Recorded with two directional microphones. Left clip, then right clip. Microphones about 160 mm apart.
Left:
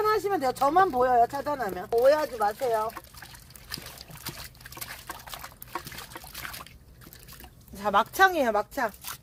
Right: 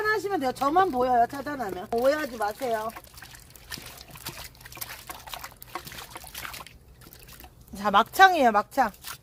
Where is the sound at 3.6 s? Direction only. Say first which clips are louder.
Left 1 dB; 15° left (ahead or behind).